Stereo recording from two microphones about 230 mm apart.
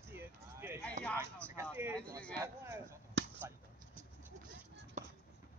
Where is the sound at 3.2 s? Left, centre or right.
Right.